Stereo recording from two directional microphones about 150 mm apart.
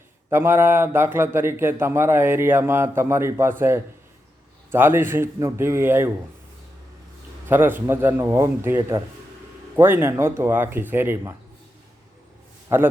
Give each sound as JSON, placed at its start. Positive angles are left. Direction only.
{"t": 0.3, "sound": "a man's voice", "side_deg": -15}
{"t": 7.4, "sound": "a man's voice", "side_deg": -15}
{"t": 12.6, "sound": "a man's voice", "side_deg": -15}